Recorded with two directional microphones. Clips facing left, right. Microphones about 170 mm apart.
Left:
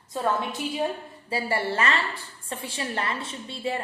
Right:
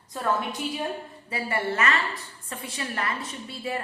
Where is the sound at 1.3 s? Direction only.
30° left (ahead or behind).